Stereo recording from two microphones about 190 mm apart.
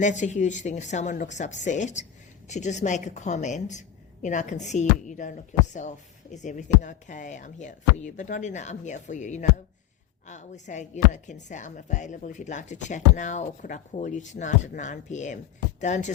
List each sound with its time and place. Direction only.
0.0 s speech: 40° left (ahead or behind)
6.3 s speech: 40° left (ahead or behind)